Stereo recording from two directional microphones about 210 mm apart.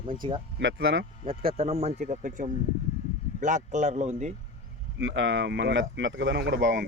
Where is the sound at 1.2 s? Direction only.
25° right (ahead or behind).